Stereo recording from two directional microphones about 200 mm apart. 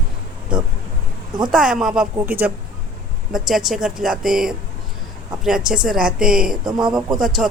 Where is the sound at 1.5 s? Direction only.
5° right (ahead or behind).